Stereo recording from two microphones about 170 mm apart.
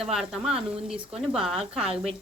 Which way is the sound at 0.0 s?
5° right (ahead or behind).